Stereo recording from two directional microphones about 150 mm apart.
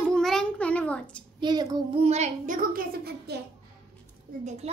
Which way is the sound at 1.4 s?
30° right (ahead or behind).